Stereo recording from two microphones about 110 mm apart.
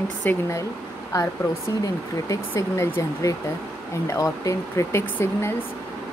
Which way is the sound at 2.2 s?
25° left (ahead or behind).